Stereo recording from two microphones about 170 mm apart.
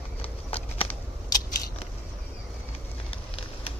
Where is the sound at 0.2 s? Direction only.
35° left (ahead or behind).